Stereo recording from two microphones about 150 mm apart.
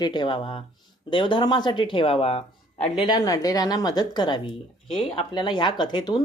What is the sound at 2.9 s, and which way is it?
A woman's voice, 30° left (ahead or behind).